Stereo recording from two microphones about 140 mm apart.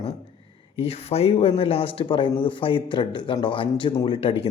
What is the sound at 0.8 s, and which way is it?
Speech, 45° left (ahead or behind).